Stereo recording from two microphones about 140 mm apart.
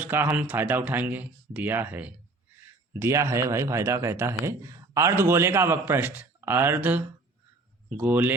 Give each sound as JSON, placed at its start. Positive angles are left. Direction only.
{"t": 0.0, "sound": "speech", "side_deg": -15}